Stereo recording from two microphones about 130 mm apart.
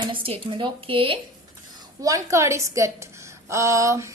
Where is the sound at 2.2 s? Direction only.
20° right (ahead or behind).